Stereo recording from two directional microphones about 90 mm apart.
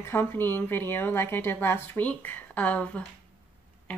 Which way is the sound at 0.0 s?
25° left (ahead or behind).